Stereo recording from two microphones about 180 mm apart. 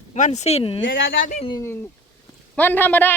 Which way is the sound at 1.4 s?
15° left (ahead or behind).